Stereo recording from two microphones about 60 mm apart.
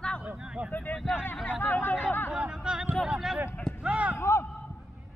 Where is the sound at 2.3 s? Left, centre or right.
Centre.